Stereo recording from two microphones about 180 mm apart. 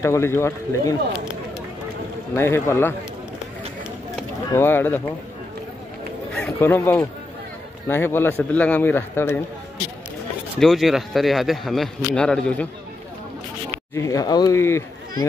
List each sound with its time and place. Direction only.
0.0 s a man's voice: 15° left (ahead or behind)
2.3 s a man's voice: 15° left (ahead or behind)
4.5 s a man's voice: 15° left (ahead or behind)
6.3 s a man's voice: 10° left (ahead or behind)
10.6 s speech: centre (ahead or behind)
13.9 s a man's voice: 20° left (ahead or behind)